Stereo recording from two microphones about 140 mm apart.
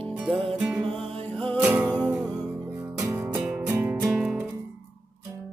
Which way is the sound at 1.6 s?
10° right (ahead or behind).